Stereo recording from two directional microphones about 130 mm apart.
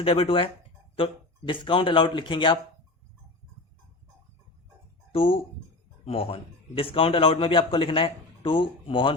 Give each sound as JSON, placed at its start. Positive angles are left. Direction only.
{"t": 0.0, "sound": "a man's voice", "side_deg": 45}
{"t": 5.1, "sound": "a man's voice", "side_deg": 45}